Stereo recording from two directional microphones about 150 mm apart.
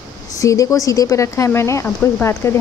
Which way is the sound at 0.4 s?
20° left (ahead or behind).